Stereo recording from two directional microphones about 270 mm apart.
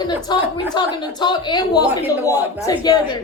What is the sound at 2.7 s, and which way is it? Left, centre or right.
Speech, centre.